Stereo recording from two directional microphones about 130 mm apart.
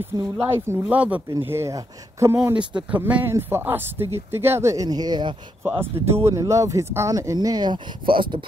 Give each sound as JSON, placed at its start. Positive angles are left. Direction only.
{"t": 0.7, "sound": "speech", "side_deg": -10}
{"t": 5.6, "sound": "speech", "side_deg": -15}